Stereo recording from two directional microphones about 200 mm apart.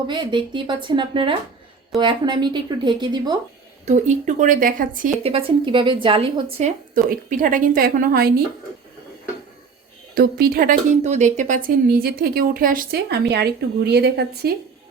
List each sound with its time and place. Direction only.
0.1 s speech: 25° right (ahead or behind)
3.8 s speech: 35° right (ahead or behind)
5.2 s speech: 30° right (ahead or behind); by 8.3 s 45° right (ahead or behind)
10.2 s speech: 50° right (ahead or behind)